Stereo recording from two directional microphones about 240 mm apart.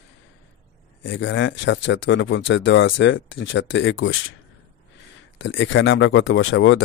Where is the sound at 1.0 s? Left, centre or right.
Left.